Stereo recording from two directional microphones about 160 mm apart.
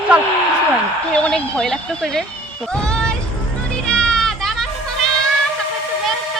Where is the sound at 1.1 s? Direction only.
5° left (ahead or behind).